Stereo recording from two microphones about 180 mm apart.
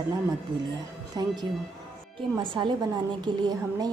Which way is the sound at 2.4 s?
25° right (ahead or behind).